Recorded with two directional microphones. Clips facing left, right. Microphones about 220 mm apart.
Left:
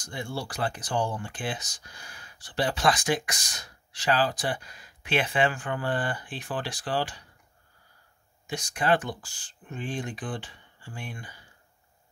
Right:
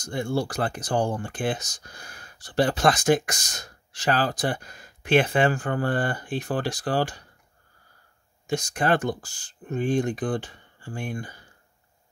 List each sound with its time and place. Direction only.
0.0 s speech: 45° right (ahead or behind)
8.5 s speech: 45° right (ahead or behind)